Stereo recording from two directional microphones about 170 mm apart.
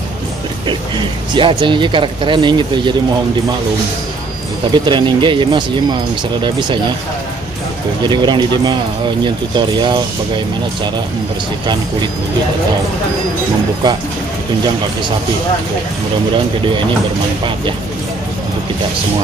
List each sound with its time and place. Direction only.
0.7 s speech: 30° right (ahead or behind)
4.7 s speech: 25° right (ahead or behind)
8.0 s speech: 25° right (ahead or behind)